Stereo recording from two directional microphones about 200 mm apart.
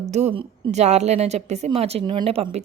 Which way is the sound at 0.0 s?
35° right (ahead or behind).